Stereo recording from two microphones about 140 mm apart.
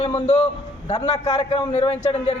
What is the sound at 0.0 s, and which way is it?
Speech, 45° left (ahead or behind).